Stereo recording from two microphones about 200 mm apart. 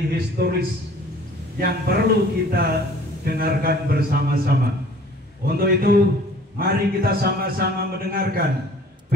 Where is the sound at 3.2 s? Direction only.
50° right (ahead or behind).